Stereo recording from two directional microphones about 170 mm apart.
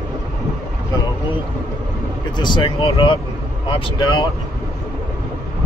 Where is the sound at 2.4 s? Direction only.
25° left (ahead or behind).